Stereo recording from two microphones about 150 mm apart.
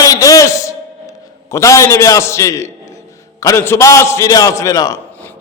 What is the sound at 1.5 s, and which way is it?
A man's voice, 20° left (ahead or behind).